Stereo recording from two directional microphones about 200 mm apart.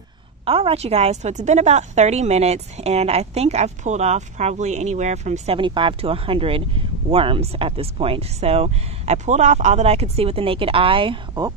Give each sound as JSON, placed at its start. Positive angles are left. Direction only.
{"t": 0.5, "sound": "a woman's voice", "side_deg": -30}